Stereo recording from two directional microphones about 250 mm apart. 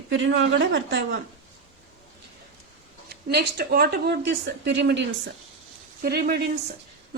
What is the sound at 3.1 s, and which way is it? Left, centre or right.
Speech, right.